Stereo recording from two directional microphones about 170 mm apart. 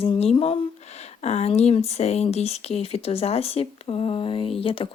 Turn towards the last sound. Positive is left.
turn(degrees=30)  # may be behind; listen again after turning